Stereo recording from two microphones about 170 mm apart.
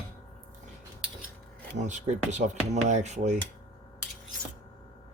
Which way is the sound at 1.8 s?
45° right (ahead or behind).